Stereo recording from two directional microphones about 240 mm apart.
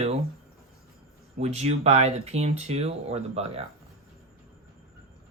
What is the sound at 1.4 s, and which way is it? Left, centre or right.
Speech, right.